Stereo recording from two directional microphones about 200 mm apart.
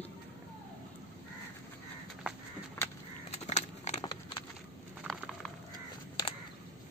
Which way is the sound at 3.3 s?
35° left (ahead or behind).